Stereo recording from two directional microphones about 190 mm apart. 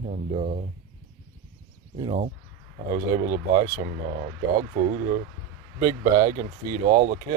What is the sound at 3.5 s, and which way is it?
Speech, 20° right (ahead or behind).